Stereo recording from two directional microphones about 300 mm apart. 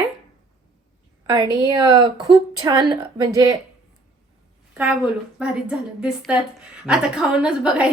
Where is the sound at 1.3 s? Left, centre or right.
Centre.